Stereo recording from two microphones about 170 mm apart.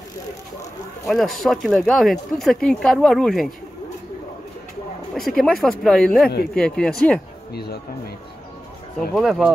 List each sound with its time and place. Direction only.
1.0 s speech: centre (ahead or behind)
5.1 s speech: centre (ahead or behind)
7.5 s speech: 70° left (ahead or behind)
9.1 s speech: centre (ahead or behind)